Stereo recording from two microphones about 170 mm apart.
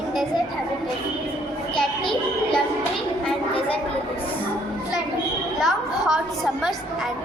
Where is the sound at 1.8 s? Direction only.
5° left (ahead or behind).